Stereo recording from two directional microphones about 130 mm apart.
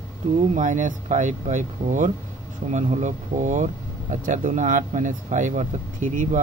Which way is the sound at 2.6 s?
60° right (ahead or behind).